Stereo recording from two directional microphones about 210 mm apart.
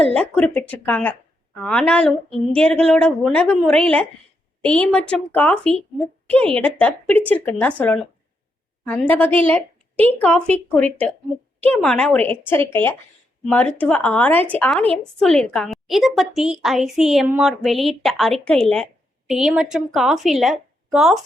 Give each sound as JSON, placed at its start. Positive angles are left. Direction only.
{"t": 0.0, "sound": "a woman's voice", "side_deg": 5}
{"t": 8.8, "sound": "a woman's voice", "side_deg": 5}